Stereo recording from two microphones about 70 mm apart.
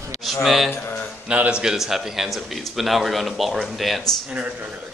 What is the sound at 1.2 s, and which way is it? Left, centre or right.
Speech, centre.